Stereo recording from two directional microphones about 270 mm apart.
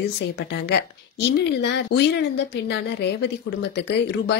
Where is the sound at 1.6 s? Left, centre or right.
Left.